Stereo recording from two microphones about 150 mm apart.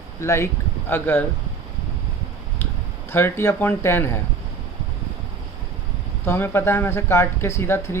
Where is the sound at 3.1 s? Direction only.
15° left (ahead or behind).